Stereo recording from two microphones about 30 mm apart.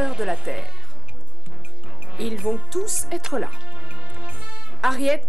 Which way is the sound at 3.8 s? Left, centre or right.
Right.